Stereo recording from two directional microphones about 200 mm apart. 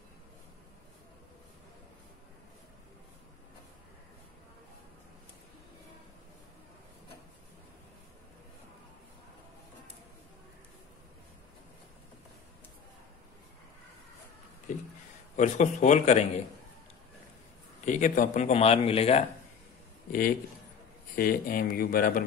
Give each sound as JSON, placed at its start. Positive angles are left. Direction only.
{"t": 15.3, "sound": "speech", "side_deg": 35}
{"t": 17.8, "sound": "speech", "side_deg": 40}
{"t": 20.1, "sound": "speech", "side_deg": 45}